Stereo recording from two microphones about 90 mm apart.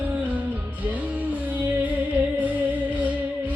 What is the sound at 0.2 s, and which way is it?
Music, 15° right (ahead or behind).